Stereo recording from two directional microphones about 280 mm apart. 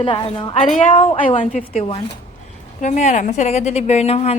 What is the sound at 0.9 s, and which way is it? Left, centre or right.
Speech, centre.